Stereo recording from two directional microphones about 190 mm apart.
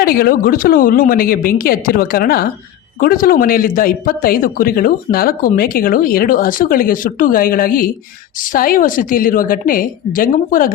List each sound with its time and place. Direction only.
0.0 s speech: 50° left (ahead or behind)